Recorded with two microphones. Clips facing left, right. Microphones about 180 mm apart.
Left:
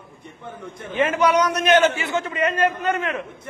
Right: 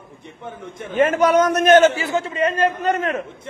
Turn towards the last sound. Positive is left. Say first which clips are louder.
# right 3 dB
turn(degrees=-40)  # may be behind; listen again after turning